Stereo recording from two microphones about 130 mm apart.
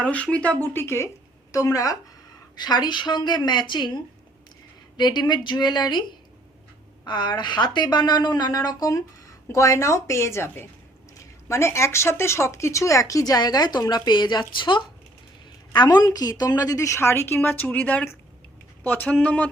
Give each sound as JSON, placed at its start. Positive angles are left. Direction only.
{"t": 0.0, "sound": "speech", "side_deg": 10}